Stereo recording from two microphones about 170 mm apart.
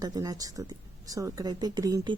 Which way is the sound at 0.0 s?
20° right (ahead or behind).